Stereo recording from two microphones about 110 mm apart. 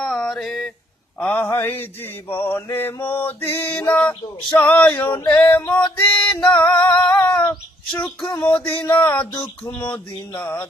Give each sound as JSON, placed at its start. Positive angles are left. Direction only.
{"t": 0.0, "sound": "mantra", "side_deg": 5}
{"t": 1.2, "sound": "mantra", "side_deg": 15}
{"t": 2.6, "sound": "male singing", "side_deg": 20}
{"t": 5.3, "sound": "mantra", "side_deg": 20}
{"t": 6.0, "sound": "music", "side_deg": 10}
{"t": 6.6, "sound": "male singing", "side_deg": 15}